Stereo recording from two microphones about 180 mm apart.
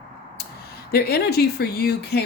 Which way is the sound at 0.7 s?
60° left (ahead or behind).